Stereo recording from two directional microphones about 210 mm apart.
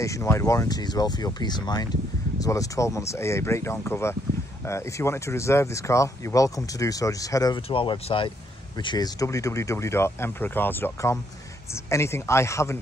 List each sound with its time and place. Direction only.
0.0 s speech: 15° left (ahead or behind)